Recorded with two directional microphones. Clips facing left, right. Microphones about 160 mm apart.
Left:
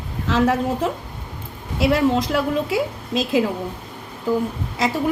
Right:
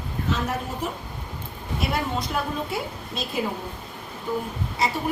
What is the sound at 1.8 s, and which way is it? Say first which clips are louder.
A woman's voice: left 10 dB; 90° left.